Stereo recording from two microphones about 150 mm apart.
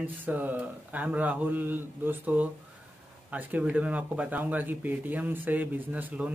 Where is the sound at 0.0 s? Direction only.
10° right (ahead or behind).